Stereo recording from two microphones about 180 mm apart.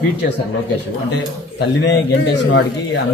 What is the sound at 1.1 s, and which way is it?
A man's voice, 75° left (ahead or behind).